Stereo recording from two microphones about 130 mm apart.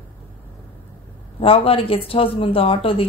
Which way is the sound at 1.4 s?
45° left (ahead or behind).